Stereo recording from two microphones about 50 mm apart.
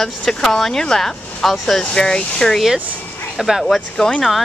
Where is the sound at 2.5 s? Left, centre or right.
Centre.